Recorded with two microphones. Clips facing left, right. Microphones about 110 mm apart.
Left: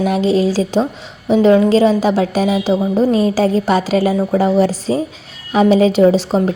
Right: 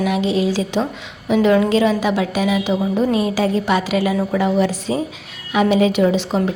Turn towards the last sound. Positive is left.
turn(degrees=35)  # may be behind; listen again after turning